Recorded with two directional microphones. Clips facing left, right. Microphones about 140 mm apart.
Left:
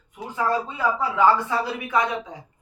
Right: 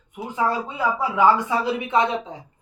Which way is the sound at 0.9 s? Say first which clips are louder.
Right 1 dB; 15° right (ahead or behind).